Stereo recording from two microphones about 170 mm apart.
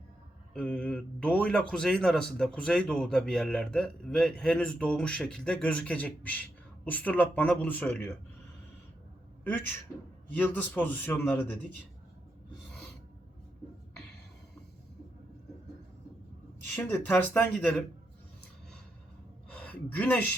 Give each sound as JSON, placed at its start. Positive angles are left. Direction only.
{"t": 0.5, "sound": "speech", "side_deg": 5}
{"t": 9.4, "sound": "a man's voice", "side_deg": 10}
{"t": 16.7, "sound": "speech", "side_deg": 15}
{"t": 19.5, "sound": "a sound", "side_deg": 10}